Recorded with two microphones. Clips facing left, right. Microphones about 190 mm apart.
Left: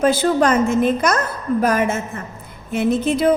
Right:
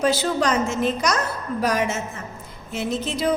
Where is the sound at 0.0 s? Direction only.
50° left (ahead or behind).